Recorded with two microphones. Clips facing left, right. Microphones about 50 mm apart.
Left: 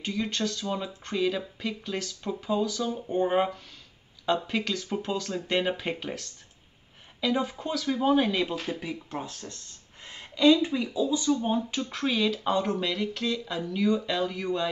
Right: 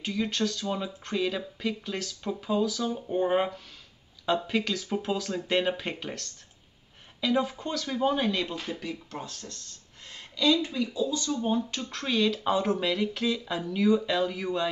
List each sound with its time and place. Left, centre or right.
0.0 s speech: centre